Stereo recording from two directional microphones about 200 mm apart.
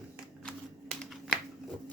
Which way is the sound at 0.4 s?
Centre (ahead or behind).